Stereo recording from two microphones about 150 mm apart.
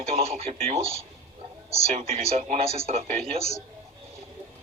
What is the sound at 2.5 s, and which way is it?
Speech, 40° right (ahead or behind).